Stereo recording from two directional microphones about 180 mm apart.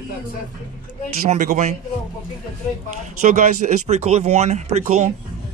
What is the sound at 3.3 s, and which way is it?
Speech, 45° right (ahead or behind).